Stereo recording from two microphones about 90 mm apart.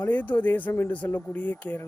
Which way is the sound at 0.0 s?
20° left (ahead or behind).